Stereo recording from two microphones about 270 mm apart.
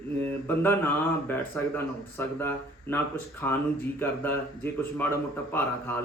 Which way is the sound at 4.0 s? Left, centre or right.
Centre.